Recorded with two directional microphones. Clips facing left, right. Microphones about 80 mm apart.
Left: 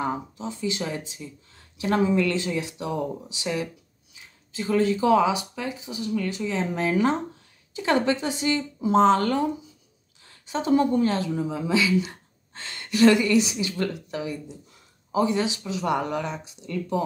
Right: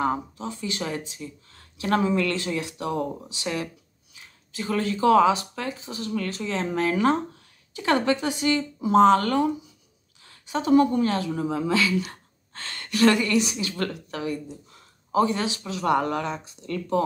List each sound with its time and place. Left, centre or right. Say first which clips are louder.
0.0 s a woman's voice: right 2 dB; left